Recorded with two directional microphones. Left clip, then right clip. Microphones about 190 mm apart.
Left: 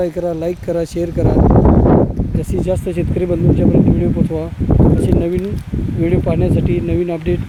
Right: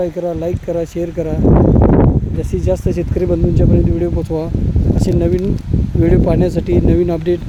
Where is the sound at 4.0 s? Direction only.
20° right (ahead or behind).